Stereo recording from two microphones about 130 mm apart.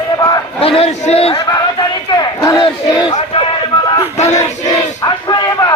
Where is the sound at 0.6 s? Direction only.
45° left (ahead or behind).